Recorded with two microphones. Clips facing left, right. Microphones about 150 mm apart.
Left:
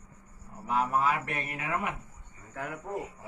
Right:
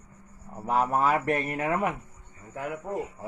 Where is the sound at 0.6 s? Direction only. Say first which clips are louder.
Right 3 dB; 40° right (ahead or behind).